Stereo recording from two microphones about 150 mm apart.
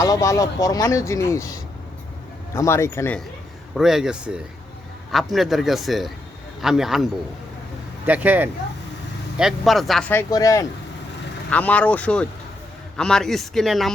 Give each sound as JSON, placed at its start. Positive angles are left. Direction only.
{"t": 0.0, "sound": "speech", "side_deg": 20}
{"t": 3.8, "sound": "speech", "side_deg": 0}
{"t": 10.1, "sound": "speech", "side_deg": 20}
{"t": 11.5, "sound": "speech", "side_deg": 10}